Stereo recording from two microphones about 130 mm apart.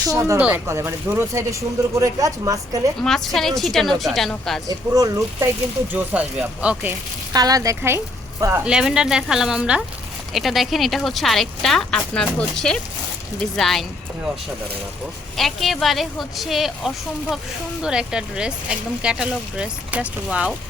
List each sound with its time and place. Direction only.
0.1 s speech: 25° right (ahead or behind)
0.3 s speech: 10° right (ahead or behind); by 2.6 s 25° right (ahead or behind)
3.0 s speech: 5° left (ahead or behind)
4.9 s speech: 25° right (ahead or behind)
5.9 s speech: 10° right (ahead or behind)
7.3 s speech: 30° right (ahead or behind)
8.6 s speech: 5° right (ahead or behind)
15.4 s speech: centre (ahead or behind)